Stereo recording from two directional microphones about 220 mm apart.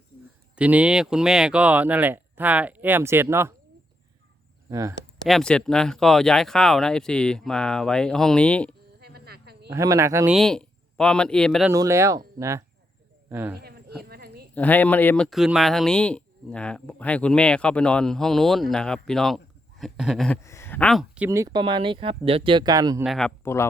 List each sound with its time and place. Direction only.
0.5 s speech: 5° right (ahead or behind)
4.7 s speech: 15° right (ahead or behind)
5.2 s speech: 5° left (ahead or behind)
9.0 s insect: 45° right (ahead or behind)
9.6 s speech: 15° right (ahead or behind)
10.3 s speech: centre (ahead or behind)
11.7 s speech: 15° right (ahead or behind)
13.6 s a sound: 45° right (ahead or behind)
14.5 s speech: 10° left (ahead or behind)
20.4 s a sound: 10° left (ahead or behind)
21.2 s speech: 15° right (ahead or behind)
23.0 s speech: 5° left (ahead or behind)